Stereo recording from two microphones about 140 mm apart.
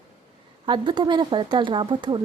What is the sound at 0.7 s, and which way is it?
Speech, 35° right (ahead or behind).